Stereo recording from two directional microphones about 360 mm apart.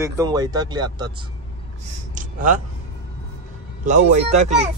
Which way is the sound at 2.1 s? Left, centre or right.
Right.